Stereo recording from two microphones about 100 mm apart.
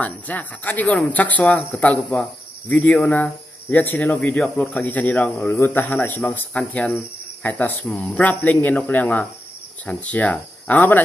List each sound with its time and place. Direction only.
0.0 s speech: 15° left (ahead or behind)